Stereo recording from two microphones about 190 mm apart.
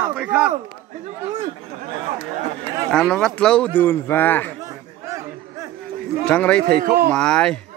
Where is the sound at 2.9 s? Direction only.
5° left (ahead or behind).